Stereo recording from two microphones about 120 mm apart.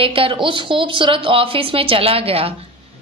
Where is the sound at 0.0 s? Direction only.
50° right (ahead or behind).